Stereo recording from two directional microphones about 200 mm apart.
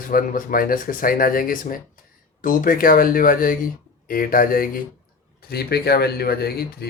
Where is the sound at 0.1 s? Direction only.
45° left (ahead or behind).